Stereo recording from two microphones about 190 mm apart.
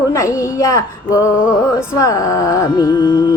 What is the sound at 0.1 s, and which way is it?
Speech, 15° left (ahead or behind).